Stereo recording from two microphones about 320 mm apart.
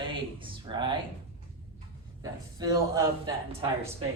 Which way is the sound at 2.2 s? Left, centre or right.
Centre.